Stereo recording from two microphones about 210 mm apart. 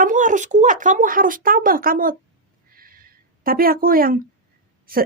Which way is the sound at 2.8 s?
45° right (ahead or behind).